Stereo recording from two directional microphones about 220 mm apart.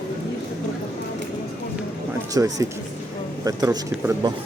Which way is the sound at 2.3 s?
15° right (ahead or behind).